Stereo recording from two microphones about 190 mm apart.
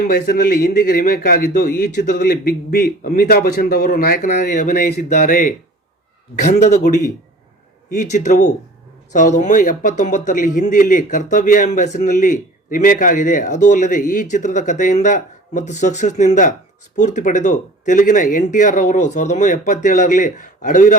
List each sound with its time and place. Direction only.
0.1 s a man's voice: 50° left (ahead or behind)